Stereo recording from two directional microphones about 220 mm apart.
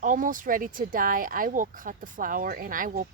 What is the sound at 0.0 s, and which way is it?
Speech, 35° right (ahead or behind).